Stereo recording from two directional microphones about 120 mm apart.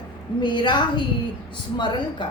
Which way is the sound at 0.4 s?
40° left (ahead or behind).